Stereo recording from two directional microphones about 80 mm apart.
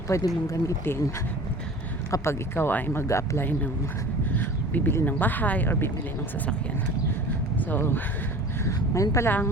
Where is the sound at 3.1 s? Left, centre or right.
Left.